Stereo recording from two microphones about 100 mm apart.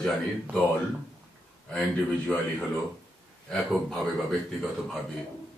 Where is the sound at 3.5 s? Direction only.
5° left (ahead or behind).